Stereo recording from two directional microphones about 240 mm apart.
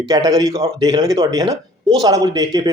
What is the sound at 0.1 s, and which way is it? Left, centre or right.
Speech, centre.